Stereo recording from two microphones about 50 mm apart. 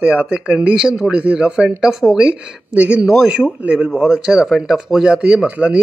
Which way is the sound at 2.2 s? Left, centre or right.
Right.